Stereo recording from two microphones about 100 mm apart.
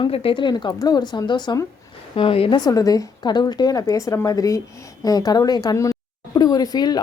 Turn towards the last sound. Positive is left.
turn(degrees=40)  # may be behind; listen again after turning